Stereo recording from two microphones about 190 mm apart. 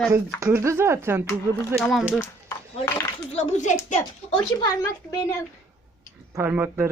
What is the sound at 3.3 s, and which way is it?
Speech, 40° left (ahead or behind).